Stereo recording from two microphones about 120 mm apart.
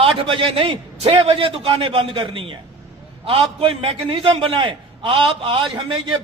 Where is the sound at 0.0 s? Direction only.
45° right (ahead or behind).